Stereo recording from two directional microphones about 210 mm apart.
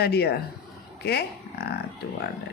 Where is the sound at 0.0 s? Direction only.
50° left (ahead or behind).